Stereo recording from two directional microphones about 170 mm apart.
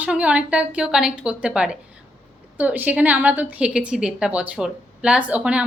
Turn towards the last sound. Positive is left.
turn(degrees=-5)  # may be behind; listen again after turning